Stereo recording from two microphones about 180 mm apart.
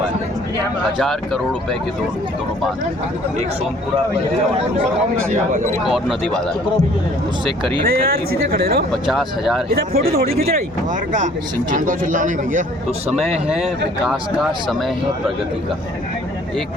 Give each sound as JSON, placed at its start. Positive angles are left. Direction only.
{"t": 0.9, "sound": "speech", "side_deg": 0}
{"t": 5.8, "sound": "speech", "side_deg": 0}
{"t": 7.9, "sound": "speech", "side_deg": -55}
{"t": 8.9, "sound": "speech", "side_deg": 0}
{"t": 9.6, "sound": "speech", "side_deg": -55}
{"t": 11.7, "sound": "a man's voice", "side_deg": -45}
{"t": 13.1, "sound": "speech", "side_deg": -5}